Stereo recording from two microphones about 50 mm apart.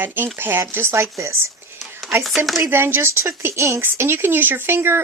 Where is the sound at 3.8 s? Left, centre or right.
Right.